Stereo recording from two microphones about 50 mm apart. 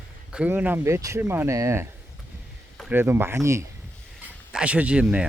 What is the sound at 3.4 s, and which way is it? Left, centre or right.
Speech, right.